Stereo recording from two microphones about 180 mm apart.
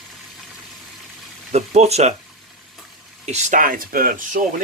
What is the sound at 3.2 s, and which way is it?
Speech, 40° right (ahead or behind).